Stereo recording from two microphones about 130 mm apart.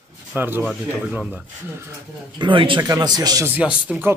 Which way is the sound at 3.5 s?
10° right (ahead or behind).